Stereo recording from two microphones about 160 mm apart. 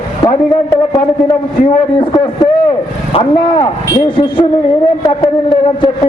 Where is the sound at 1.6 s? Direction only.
30° left (ahead or behind).